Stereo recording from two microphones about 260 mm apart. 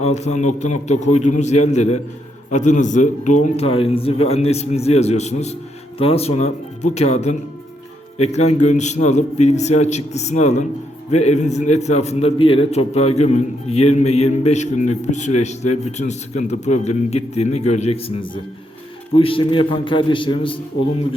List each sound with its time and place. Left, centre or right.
0.0 s a man's voice: left